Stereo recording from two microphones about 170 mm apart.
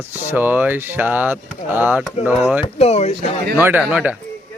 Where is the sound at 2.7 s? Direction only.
40° left (ahead or behind).